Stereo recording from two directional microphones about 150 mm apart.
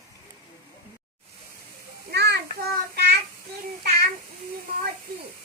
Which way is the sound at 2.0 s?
90° right.